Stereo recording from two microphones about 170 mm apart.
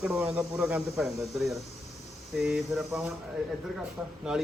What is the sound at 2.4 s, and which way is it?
Speech, centre (ahead or behind).